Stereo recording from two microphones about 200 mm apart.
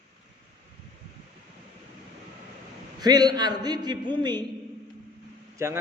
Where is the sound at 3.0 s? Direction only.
20° right (ahead or behind).